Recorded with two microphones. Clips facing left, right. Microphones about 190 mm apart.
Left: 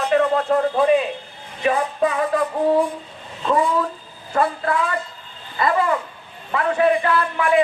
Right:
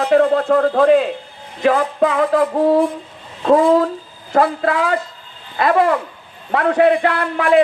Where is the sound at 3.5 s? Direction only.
70° right (ahead or behind).